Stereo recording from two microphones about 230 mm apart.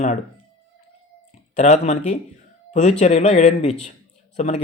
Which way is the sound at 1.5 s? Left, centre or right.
Left.